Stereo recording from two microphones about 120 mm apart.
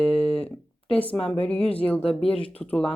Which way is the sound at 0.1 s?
55° left (ahead or behind).